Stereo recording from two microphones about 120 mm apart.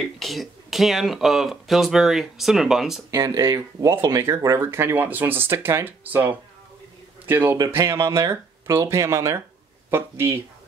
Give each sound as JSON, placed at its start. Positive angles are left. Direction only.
{"t": 0.2, "sound": "speech", "side_deg": 0}
{"t": 3.1, "sound": "speech", "side_deg": -30}
{"t": 7.5, "sound": "speech", "side_deg": -30}